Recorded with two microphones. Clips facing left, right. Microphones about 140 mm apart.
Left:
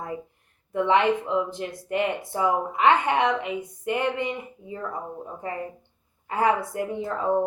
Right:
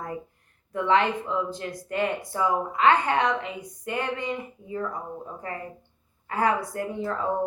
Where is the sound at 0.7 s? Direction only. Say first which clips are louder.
Left 2 dB; 20° left (ahead or behind).